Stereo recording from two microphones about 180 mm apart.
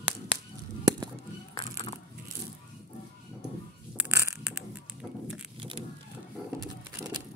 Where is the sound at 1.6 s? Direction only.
35° left (ahead or behind).